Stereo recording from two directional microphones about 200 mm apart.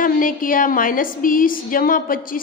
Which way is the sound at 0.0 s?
45° left (ahead or behind).